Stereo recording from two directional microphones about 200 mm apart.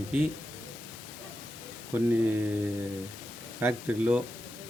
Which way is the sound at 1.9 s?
10° right (ahead or behind).